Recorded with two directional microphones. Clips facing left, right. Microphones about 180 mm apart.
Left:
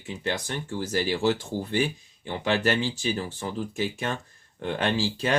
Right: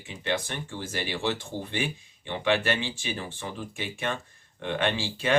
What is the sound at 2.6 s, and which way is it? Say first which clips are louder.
Speech: left 4 dB; 40° left (ahead or behind).